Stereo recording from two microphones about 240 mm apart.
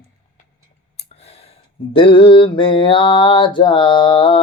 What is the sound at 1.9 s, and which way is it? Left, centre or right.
Mantra, left.